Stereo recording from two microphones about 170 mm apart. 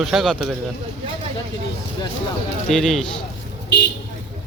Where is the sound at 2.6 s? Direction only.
Centre (ahead or behind).